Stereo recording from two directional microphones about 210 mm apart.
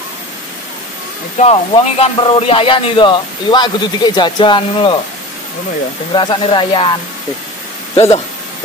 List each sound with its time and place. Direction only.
1.4 s a man's voice: 30° left (ahead or behind)
6.1 s a man's voice: 20° left (ahead or behind)